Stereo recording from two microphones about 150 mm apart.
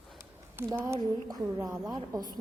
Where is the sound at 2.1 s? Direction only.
25° right (ahead or behind).